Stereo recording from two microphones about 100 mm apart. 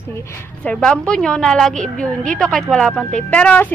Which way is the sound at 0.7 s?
5° left (ahead or behind).